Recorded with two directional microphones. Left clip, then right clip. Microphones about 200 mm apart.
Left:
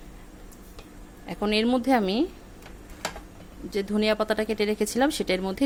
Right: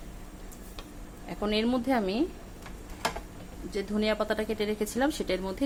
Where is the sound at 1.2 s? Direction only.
50° left (ahead or behind).